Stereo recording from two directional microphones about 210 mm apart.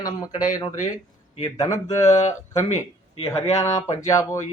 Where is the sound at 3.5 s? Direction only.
15° left (ahead or behind).